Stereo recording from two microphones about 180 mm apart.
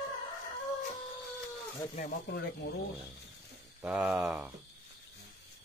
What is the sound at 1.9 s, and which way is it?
Speech, 45° left (ahead or behind).